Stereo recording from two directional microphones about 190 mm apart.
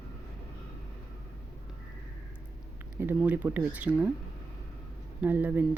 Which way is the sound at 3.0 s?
10° right (ahead or behind).